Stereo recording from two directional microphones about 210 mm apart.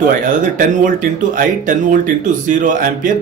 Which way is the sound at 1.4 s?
40° right (ahead or behind).